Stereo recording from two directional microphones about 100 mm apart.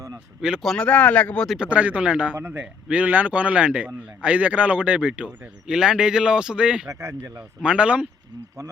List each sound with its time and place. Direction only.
0.4 s a man's voice: 10° right (ahead or behind)
0.7 s speech: 10° left (ahead or behind)
1.5 s a man's voice: 10° right (ahead or behind)
6.8 s speech: 30° right (ahead or behind)
7.6 s a man's voice: 10° right (ahead or behind)